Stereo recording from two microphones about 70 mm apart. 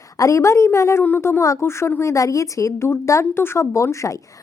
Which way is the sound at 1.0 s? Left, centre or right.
Left.